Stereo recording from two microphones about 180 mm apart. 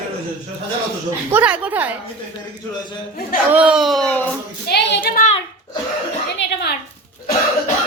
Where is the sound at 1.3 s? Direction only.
5° right (ahead or behind).